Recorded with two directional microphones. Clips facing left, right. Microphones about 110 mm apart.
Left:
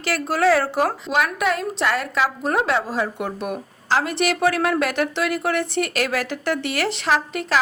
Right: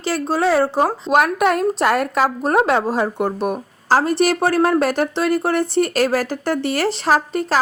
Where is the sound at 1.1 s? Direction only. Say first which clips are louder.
Right 8 dB; 45° right (ahead or behind).